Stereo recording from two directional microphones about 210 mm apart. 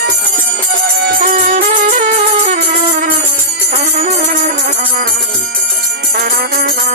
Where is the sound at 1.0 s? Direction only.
45° right (ahead or behind).